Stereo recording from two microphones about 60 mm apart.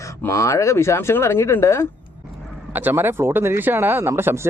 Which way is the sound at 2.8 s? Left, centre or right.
Right.